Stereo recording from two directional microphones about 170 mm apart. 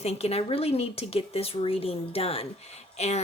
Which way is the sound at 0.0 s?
35° left (ahead or behind).